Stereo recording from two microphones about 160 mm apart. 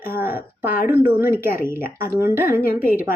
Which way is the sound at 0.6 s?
60° left (ahead or behind).